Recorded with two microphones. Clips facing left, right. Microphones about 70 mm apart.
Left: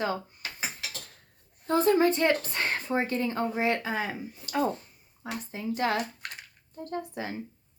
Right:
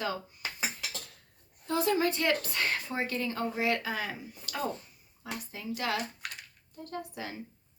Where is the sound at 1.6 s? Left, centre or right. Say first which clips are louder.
Left 5 dB; left.